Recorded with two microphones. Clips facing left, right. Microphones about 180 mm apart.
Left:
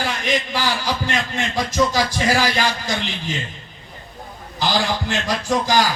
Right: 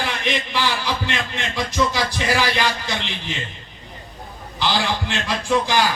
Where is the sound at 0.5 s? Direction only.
40° left (ahead or behind).